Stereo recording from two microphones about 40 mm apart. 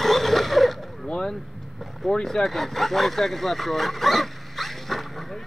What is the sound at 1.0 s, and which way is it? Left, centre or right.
Vehicle, centre.